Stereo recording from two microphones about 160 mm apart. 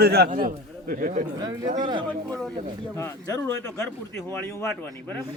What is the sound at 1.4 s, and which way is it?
Speech, 25° right (ahead or behind).